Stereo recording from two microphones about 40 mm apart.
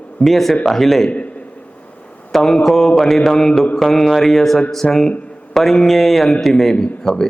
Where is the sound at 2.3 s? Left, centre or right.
Centre.